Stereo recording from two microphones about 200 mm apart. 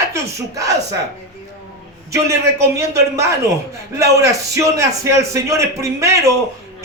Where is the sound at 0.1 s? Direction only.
15° right (ahead or behind).